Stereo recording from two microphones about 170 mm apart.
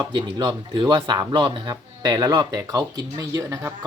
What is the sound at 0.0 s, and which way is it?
Speech, 25° right (ahead or behind).